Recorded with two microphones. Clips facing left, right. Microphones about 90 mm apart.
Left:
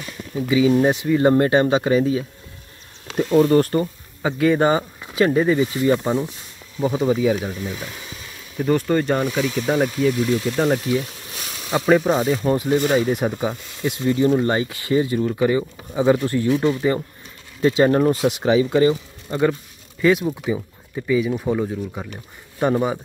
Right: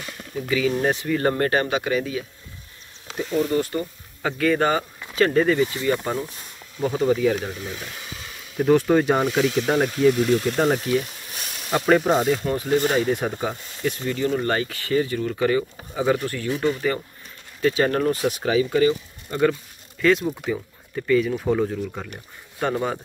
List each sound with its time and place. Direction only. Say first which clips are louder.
0.5 s speech: left 5 dB; 20° left (ahead or behind)
3.2 s speech: left 7 dB; 65° left (ahead or behind)
4.2 s speech: left 3 dB; 20° left (ahead or behind)
8.6 s speech: right 1 dB; centre (ahead or behind)
12.5 s speech: left 2 dB; 15° left (ahead or behind)
20.0 s speech: left 2 dB; 15° left (ahead or behind)